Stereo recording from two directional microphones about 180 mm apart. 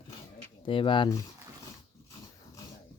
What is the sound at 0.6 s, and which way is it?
Speech, 30° left (ahead or behind).